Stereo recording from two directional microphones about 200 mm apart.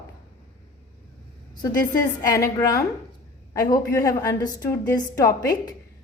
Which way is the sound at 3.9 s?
15° left (ahead or behind).